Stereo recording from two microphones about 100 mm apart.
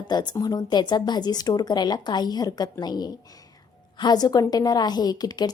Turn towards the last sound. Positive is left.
turn(degrees=40)  # may be behind; listen again after turning